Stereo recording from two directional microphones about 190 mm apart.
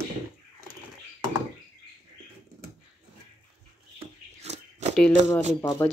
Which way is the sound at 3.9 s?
35° right (ahead or behind).